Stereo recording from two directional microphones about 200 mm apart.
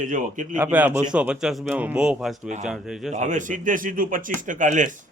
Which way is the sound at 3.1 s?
35° right (ahead or behind).